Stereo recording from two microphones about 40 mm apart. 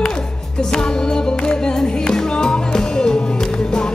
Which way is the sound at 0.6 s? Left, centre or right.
Left.